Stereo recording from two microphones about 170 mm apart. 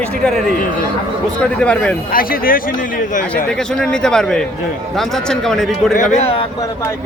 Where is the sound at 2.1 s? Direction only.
55° left (ahead or behind).